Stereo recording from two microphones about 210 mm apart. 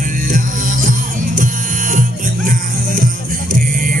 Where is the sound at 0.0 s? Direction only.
40° right (ahead or behind).